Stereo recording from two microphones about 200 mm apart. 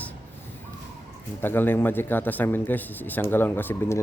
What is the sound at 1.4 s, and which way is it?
A man's voice, 10° left (ahead or behind).